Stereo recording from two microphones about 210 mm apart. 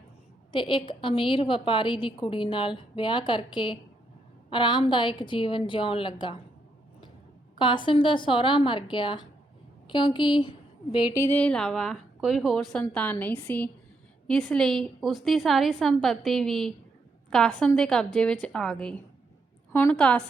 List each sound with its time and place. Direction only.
0.5 s a woman's voice: 25° left (ahead or behind)
7.6 s a woman's voice: 20° left (ahead or behind); by 20.2 s 5° left (ahead or behind)